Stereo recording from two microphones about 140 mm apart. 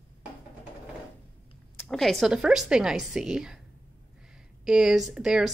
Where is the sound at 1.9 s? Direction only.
Centre (ahead or behind).